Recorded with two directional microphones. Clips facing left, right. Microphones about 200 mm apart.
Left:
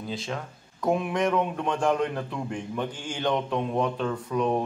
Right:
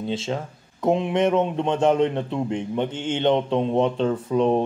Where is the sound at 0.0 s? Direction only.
25° right (ahead or behind).